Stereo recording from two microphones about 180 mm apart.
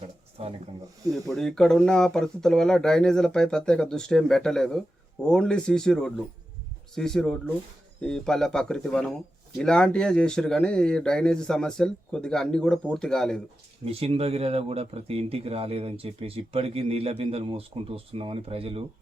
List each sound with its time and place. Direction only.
0.4 s speech: 35° right (ahead or behind)
1.1 s speech: centre (ahead or behind)
13.8 s speech: 35° right (ahead or behind)